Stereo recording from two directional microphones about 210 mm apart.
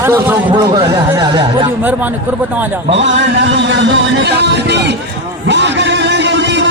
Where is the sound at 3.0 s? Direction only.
60° right (ahead or behind).